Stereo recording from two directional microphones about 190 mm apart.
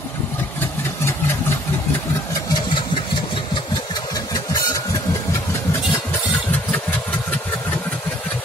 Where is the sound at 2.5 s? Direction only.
25° left (ahead or behind); by 7.8 s 10° left (ahead or behind).